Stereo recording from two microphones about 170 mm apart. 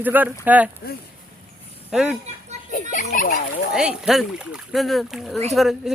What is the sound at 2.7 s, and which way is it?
Speech, 50° left (ahead or behind).